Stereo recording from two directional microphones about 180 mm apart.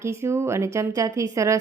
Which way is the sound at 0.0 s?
15° right (ahead or behind).